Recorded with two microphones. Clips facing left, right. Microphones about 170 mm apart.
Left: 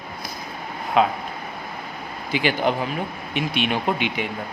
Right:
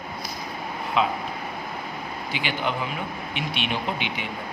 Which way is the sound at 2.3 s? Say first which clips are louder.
Left 7 dB; 40° left (ahead or behind).